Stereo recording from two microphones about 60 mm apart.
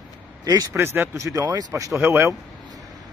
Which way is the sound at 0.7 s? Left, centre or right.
Right.